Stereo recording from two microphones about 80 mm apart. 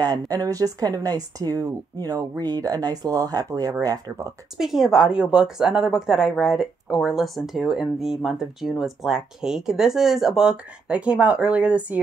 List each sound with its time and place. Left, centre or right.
0.0 s speech: right
4.6 s a woman's voice: centre